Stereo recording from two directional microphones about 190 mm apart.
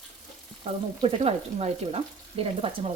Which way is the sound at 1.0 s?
35° right (ahead or behind).